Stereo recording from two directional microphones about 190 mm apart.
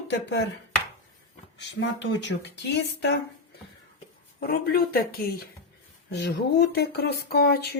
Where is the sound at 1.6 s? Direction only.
70° left (ahead or behind).